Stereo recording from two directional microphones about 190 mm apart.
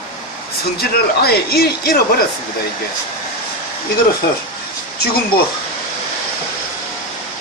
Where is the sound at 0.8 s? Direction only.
55° left (ahead or behind).